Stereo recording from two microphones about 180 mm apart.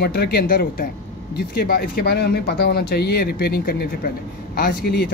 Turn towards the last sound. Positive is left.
turn(degrees=55)  # may be behind; listen again after turning